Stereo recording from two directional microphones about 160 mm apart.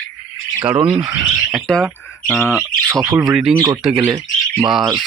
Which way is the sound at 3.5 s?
25° right (ahead or behind).